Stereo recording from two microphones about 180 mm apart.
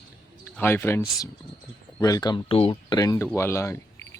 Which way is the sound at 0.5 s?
10° left (ahead or behind).